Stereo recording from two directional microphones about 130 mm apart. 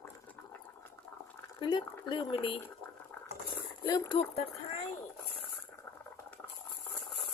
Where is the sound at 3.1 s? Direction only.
10° left (ahead or behind).